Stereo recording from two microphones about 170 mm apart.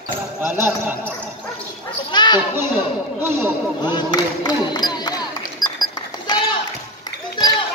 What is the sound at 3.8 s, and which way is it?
Speech, 25° left (ahead or behind).